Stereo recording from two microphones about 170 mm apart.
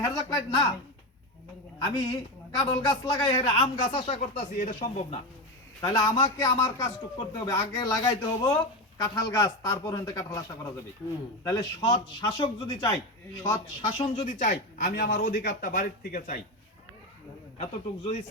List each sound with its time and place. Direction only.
0.0 s a man's voice: 20° left (ahead or behind)
2.6 s a man's voice: 20° left (ahead or behind)
3.6 s speech: 35° left (ahead or behind)
4.2 s a man's voice: 50° left (ahead or behind)
5.8 s a man's voice: 25° left (ahead or behind)
11.4 s a man's voice: 20° left (ahead or behind); by 16.4 s 50° left (ahead or behind)
17.6 s speech: 40° left (ahead or behind)